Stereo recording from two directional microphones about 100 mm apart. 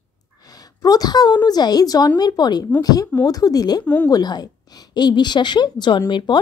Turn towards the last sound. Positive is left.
turn(degrees=50)  # may be behind; listen again after turning